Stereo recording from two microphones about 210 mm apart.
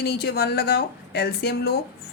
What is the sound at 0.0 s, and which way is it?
A woman's voice, 50° left (ahead or behind).